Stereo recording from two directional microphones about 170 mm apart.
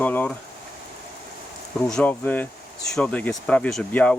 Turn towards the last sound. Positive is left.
turn(degrees=5)  # may be behind; listen again after turning